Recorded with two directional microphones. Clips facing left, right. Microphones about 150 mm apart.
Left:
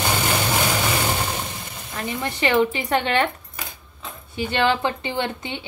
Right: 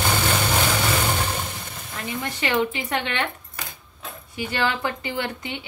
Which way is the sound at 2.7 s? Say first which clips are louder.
Left 5 dB; 35° left (ahead or behind).